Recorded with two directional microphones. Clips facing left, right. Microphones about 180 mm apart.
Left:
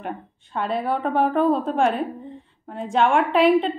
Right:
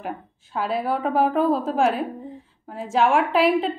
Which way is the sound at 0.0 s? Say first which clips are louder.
Even; centre (ahead or behind).